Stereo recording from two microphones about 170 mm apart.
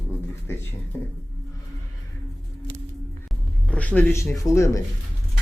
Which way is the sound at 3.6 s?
5° left (ahead or behind).